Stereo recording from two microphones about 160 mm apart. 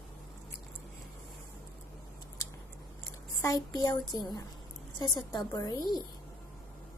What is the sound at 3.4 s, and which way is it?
Speech, 20° left (ahead or behind).